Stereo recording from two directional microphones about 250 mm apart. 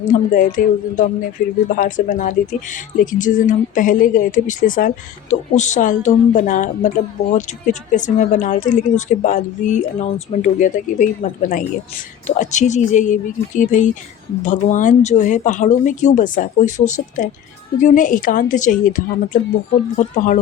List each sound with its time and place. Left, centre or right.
0.0 s a woman's voice: left